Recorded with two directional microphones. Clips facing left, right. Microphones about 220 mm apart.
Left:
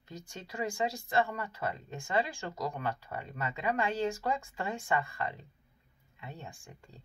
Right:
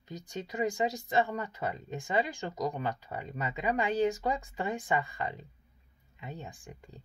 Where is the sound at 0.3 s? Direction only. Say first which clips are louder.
Right 5 dB; 20° right (ahead or behind).